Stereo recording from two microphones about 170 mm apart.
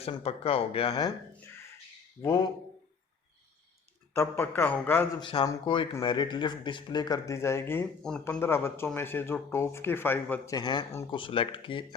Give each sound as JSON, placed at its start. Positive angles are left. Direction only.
{"t": 0.0, "sound": "speech", "side_deg": 35}
{"t": 2.2, "sound": "speech", "side_deg": 20}
{"t": 4.1, "sound": "speech", "side_deg": 15}
{"t": 5.2, "sound": "speech", "side_deg": 25}
{"t": 10.5, "sound": "speech", "side_deg": 25}